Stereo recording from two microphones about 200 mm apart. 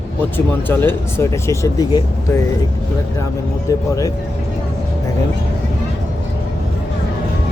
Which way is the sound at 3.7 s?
15° left (ahead or behind).